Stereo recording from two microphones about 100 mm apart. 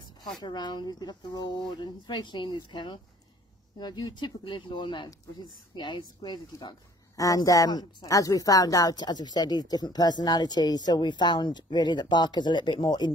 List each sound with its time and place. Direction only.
0.4 s speech: 45° left (ahead or behind)
7.2 s speech: 35° left (ahead or behind)